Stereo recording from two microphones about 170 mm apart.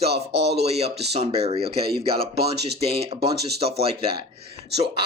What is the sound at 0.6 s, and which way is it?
Speech, 40° right (ahead or behind).